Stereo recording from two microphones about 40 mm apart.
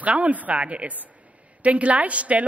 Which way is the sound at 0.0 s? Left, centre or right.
Right.